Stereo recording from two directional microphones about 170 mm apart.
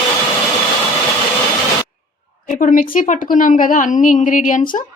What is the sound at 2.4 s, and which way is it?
A woman's voice, 55° left (ahead or behind).